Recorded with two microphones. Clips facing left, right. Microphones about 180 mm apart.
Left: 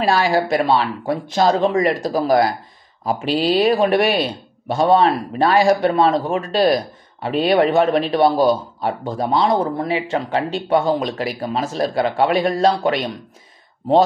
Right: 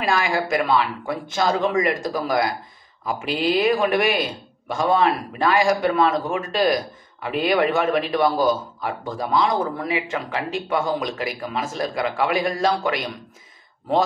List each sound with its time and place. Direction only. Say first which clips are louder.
0.0 s speech: left 5 dB; 35° left (ahead or behind)